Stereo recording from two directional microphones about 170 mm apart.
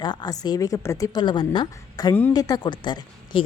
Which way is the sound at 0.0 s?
25° left (ahead or behind).